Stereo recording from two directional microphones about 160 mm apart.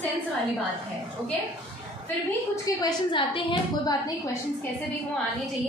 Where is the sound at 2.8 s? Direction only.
30° left (ahead or behind).